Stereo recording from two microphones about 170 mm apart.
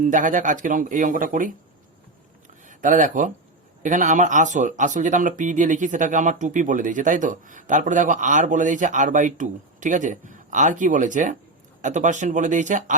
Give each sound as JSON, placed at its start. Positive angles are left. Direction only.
{"t": 0.0, "sound": "speech", "side_deg": -50}
{"t": 2.6, "sound": "speech", "side_deg": -50}